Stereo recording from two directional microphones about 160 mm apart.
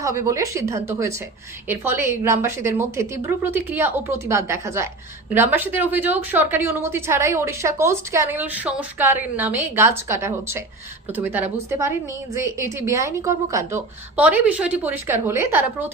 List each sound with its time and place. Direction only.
0.0 s a woman's voice: 20° right (ahead or behind)